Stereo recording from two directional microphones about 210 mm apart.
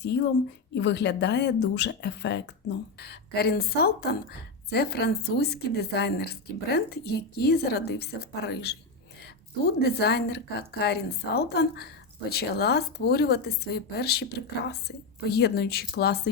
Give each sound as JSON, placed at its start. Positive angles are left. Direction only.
{"t": 0.0, "sound": "a woman's voice", "side_deg": 55}